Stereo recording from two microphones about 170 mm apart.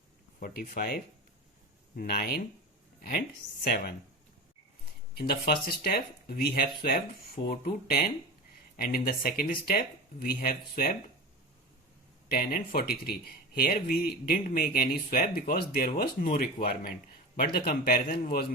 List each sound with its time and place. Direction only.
0.3 s speech: 55° left (ahead or behind)
2.0 s speech: 60° left (ahead or behind)
3.6 s speech: 65° left (ahead or behind)
5.1 s speech: 65° left (ahead or behind)
12.3 s speech: 60° left (ahead or behind)